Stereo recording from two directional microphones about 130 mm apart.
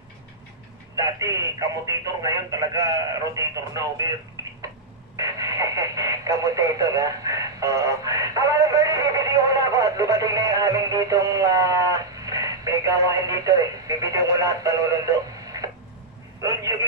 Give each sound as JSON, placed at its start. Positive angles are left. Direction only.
{"t": 0.9, "sound": "speech", "side_deg": -25}
{"t": 4.4, "sound": "a sound", "side_deg": -25}
{"t": 5.1, "sound": "speech", "side_deg": -30}